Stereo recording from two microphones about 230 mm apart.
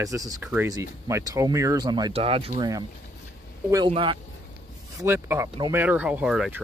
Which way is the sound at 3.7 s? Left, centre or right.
Right.